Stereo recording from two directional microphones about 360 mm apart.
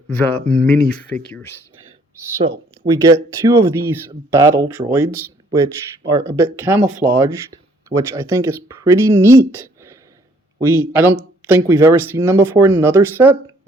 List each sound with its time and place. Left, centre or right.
0.1 s speech: centre
2.8 s speech: centre
3.4 s speech: centre